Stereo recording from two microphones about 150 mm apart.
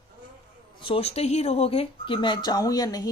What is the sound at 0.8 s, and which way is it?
Speech, 40° left (ahead or behind).